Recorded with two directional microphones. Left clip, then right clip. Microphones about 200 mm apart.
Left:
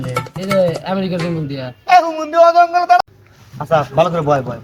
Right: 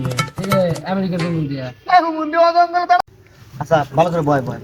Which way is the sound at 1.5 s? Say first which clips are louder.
Left 3 dB; 15° left (ahead or behind).